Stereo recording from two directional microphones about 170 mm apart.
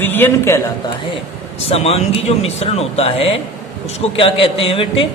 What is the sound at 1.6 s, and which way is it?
Speech, 35° left (ahead or behind).